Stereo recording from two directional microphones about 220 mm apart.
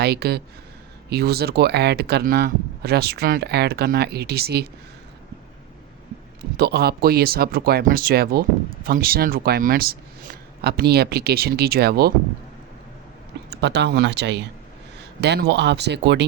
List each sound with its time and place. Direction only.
0.0 s speech: 45° right (ahead or behind)
6.6 s speech: 45° right (ahead or behind)
13.5 s speech: 50° right (ahead or behind)